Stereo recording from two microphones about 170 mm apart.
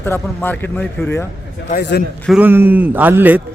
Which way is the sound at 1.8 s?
75° left (ahead or behind).